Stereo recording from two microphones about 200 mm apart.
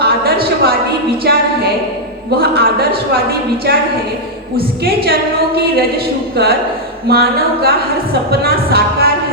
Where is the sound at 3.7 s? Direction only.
50° right (ahead or behind).